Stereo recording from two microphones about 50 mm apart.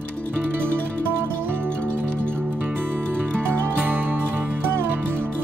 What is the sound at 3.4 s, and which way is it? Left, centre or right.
Music, right.